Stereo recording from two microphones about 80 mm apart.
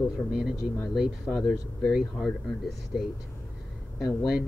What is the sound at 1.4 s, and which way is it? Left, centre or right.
Speech, centre.